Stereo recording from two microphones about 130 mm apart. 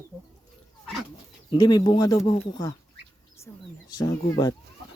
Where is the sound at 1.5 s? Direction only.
30° left (ahead or behind).